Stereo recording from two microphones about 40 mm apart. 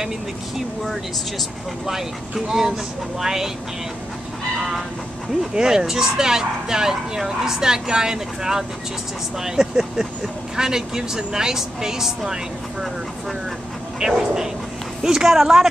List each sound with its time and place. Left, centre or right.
1.9 s speech: centre
4.6 s speech: centre
13.9 s speech: centre